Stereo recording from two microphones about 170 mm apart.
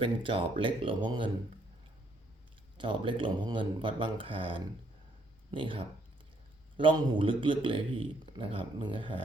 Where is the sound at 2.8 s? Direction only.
30° right (ahead or behind).